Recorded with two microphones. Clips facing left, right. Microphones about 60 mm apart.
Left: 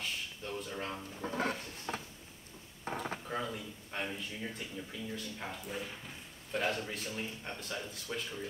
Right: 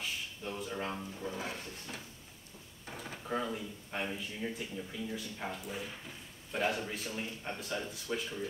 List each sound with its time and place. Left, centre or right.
0.0 s a sound: centre
1.3 s roaring cats: left
2.8 s drawer open or close: left
3.3 s speech: centre